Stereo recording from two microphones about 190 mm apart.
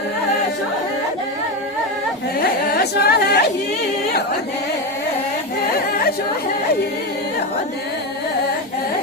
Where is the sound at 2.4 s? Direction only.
50° left (ahead or behind).